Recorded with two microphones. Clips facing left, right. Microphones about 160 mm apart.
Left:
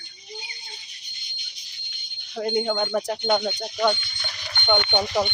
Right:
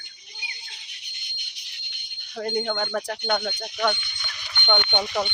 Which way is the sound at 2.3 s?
15° left (ahead or behind).